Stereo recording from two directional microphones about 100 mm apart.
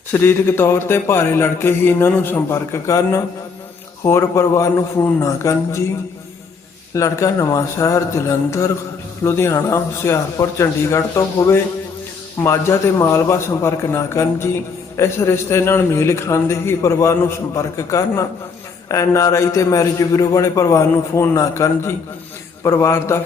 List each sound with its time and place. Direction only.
0.1 s a man's voice: 25° left (ahead or behind)
6.9 s a man's voice: 30° left (ahead or behind)